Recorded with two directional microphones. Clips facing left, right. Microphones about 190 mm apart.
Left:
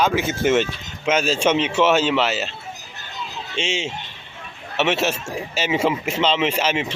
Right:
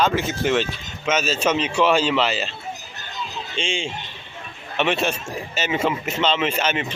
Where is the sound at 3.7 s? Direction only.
75° left (ahead or behind).